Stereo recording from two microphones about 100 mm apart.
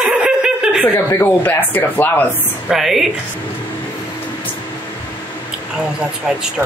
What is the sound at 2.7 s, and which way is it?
Speech, 5° right (ahead or behind).